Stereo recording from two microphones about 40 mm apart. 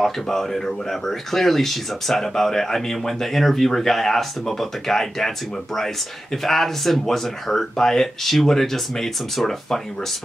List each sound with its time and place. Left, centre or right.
0.0 s speech: centre
6.3 s speech: centre